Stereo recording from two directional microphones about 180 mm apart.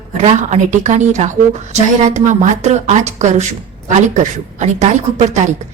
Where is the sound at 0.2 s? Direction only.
40° right (ahead or behind).